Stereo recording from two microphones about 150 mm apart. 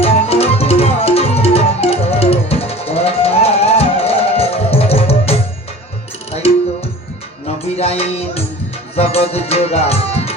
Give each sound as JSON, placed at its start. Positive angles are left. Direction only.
{"t": 0.0, "sound": "music", "side_deg": 40}
{"t": 7.8, "sound": "music", "side_deg": 40}
{"t": 9.0, "sound": "tabla", "side_deg": 45}